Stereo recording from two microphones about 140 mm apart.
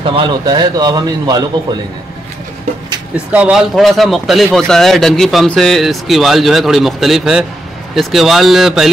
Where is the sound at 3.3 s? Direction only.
5° right (ahead or behind).